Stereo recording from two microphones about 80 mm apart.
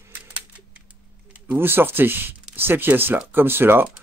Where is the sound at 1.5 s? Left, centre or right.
Right.